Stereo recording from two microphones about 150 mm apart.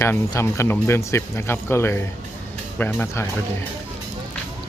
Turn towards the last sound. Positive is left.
turn(degrees=15)  # may be behind; listen again after turning